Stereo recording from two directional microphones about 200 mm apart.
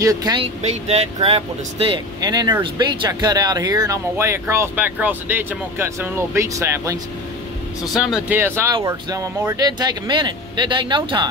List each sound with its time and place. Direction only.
0.0 s speech: 20° right (ahead or behind)
0.6 s speech: 30° right (ahead or behind); by 7.0 s 15° right (ahead or behind)
7.9 s speech: 5° right (ahead or behind); by 11.2 s 25° right (ahead or behind)